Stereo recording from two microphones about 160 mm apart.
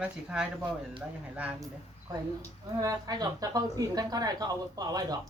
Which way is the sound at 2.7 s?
25° right (ahead or behind).